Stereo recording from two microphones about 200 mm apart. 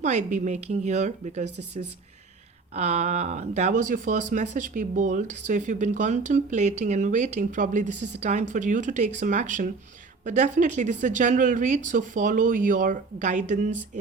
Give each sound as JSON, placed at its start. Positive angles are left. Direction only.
{"t": 0.0, "sound": "speech", "side_deg": -35}
{"t": 2.7, "sound": "speech", "side_deg": -35}